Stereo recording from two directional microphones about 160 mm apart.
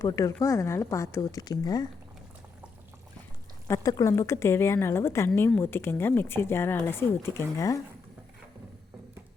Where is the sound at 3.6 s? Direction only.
20° left (ahead or behind).